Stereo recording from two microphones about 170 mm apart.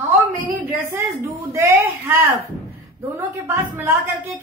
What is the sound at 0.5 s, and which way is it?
Speech, 15° right (ahead or behind).